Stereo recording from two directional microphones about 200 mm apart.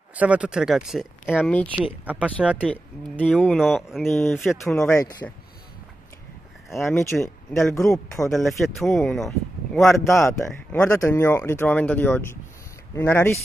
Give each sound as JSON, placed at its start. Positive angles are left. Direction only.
{"t": 0.1, "sound": "speech", "side_deg": -5}
{"t": 2.6, "sound": "speech", "side_deg": 5}
{"t": 4.7, "sound": "speech", "side_deg": 15}
{"t": 6.8, "sound": "speech", "side_deg": 5}
{"t": 7.7, "sound": "speech", "side_deg": 15}
{"t": 8.1, "sound": "speech", "side_deg": 0}
{"t": 9.8, "sound": "speech", "side_deg": 15}